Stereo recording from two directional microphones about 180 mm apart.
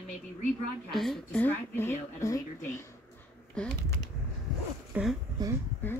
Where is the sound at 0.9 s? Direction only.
Centre (ahead or behind); by 2.8 s 15° left (ahead or behind).